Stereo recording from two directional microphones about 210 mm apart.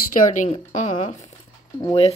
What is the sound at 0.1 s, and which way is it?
Speech, 40° left (ahead or behind).